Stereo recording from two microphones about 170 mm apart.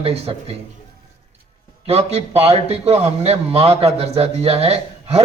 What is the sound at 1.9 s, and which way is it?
A man's voice, 35° right (ahead or behind).